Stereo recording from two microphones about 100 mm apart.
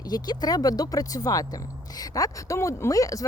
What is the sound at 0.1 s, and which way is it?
Speech, 40° left (ahead or behind).